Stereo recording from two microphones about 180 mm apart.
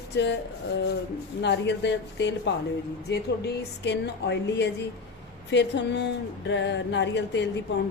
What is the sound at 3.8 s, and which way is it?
Speech, 70° left (ahead or behind).